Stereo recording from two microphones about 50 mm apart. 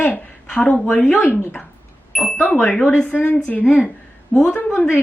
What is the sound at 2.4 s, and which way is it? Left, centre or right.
A woman's voice, left.